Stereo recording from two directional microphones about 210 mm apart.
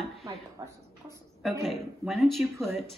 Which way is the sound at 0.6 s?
15° right (ahead or behind).